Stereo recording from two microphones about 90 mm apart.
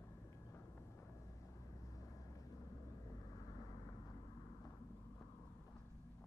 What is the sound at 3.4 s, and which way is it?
Vehicle, 45° left (ahead or behind).